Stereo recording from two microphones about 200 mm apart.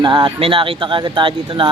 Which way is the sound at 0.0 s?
20° right (ahead or behind).